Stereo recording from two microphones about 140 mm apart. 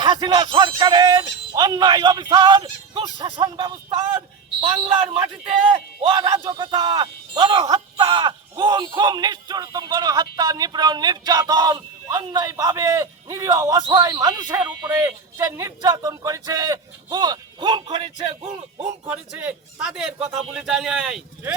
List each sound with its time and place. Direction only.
0.0 s speech: 30° right (ahead or behind)
6.0 s a man's voice: 35° right (ahead or behind)
14.6 s speech: 10° right (ahead or behind); by 18.9 s 45° right (ahead or behind)
19.0 s a man's voice: 10° right (ahead or behind)